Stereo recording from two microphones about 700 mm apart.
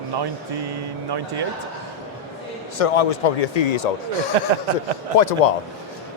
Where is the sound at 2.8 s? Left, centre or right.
Left.